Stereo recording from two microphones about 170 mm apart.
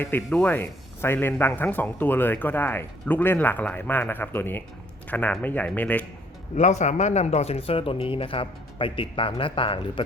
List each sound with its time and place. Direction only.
0.0 s speech: 10° left (ahead or behind)
6.6 s speech: 45° left (ahead or behind)